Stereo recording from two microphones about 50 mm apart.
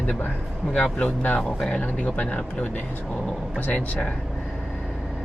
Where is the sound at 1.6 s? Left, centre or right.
Centre; by 4.1 s left.